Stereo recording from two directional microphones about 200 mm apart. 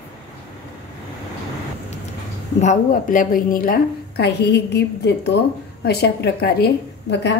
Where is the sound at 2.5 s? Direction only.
40° left (ahead or behind).